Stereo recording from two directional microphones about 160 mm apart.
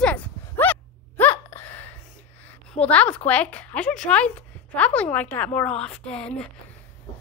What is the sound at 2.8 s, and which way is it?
A woman's voice, 10° left (ahead or behind).